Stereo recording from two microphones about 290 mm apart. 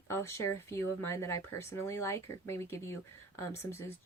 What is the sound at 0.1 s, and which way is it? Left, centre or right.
Speech, centre.